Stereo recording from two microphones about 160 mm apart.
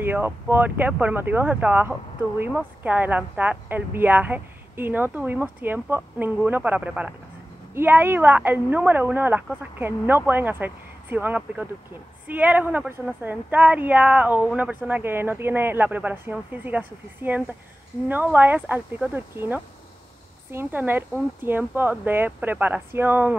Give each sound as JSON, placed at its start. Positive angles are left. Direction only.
{"t": 0.0, "sound": "speech", "side_deg": -15}